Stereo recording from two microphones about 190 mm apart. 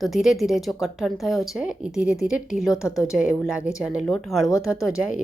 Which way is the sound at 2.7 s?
15° left (ahead or behind).